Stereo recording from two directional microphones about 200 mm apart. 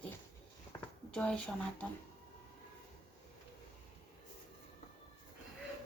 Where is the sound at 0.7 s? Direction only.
5° left (ahead or behind).